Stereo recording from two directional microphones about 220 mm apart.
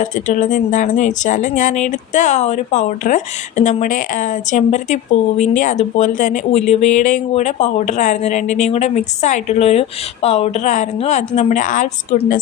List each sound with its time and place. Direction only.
0.0 s speech: 35° left (ahead or behind)